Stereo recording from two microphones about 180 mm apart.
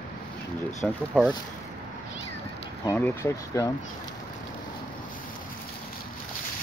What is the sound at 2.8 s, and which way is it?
Speech, 15° left (ahead or behind).